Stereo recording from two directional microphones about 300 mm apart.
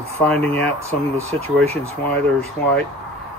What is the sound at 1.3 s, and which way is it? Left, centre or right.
Speech, right.